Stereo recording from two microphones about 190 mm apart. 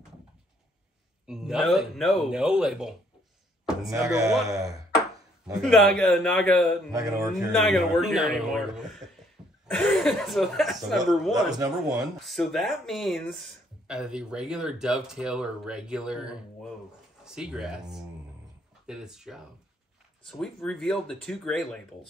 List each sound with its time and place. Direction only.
1.2 s speech: 5° right (ahead or behind)
3.9 s speech: 15° right (ahead or behind)
5.5 s speech: centre (ahead or behind)
6.9 s speech: 20° right (ahead or behind)
7.5 s speech: centre (ahead or behind)